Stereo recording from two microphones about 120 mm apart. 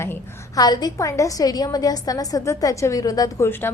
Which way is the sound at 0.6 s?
35° left (ahead or behind).